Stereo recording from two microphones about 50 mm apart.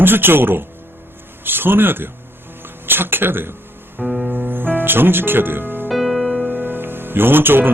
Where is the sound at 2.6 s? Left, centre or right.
Right.